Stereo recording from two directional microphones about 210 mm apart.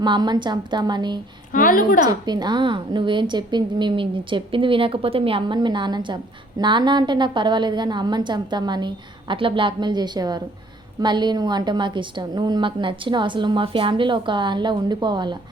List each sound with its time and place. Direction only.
0.0 s a woman's voice: 20° right (ahead or behind)
1.5 s a woman's voice: 40° left (ahead or behind)
2.2 s a woman's voice: 20° right (ahead or behind)